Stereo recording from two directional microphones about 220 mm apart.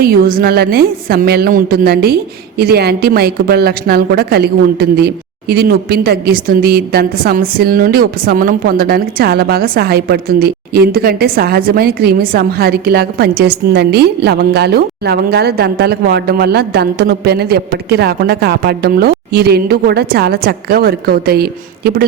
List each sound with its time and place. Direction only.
0.0 s a woman's voice: 40° right (ahead or behind)